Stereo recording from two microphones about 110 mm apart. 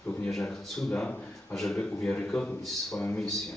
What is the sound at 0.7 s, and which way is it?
A man's voice, 10° left (ahead or behind).